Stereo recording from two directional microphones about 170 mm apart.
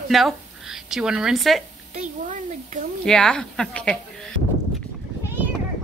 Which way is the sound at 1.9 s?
50° right (ahead or behind).